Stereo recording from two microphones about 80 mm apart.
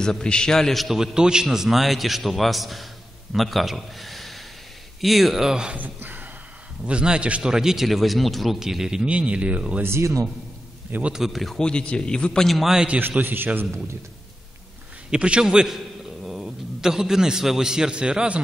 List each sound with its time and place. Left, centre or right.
0.0 s a man's voice: centre
5.8 s a man's voice: right
9.8 s a man's voice: right
10.9 s a man's voice: centre
11.1 s a man's voice: centre
13.0 s a man's voice: right
15.0 s a man's voice: centre